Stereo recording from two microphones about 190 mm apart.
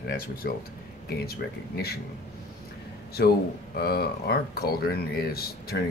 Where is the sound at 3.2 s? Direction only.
60° left (ahead or behind).